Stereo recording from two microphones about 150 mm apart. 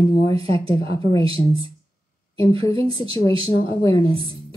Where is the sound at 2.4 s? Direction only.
35° right (ahead or behind).